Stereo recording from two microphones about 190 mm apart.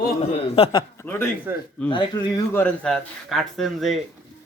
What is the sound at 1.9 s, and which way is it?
Speech, 25° left (ahead or behind).